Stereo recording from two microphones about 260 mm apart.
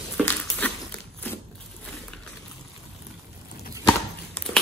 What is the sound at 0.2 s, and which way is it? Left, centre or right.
Dog, centre.